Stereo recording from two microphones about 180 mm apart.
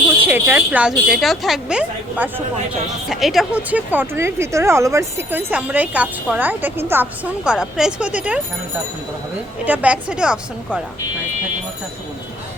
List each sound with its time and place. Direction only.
0.2 s a woman's voice: 10° right (ahead or behind)
9.6 s a woman's voice: 10° right (ahead or behind)